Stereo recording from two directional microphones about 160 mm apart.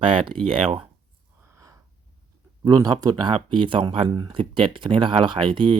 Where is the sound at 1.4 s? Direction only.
15° right (ahead or behind).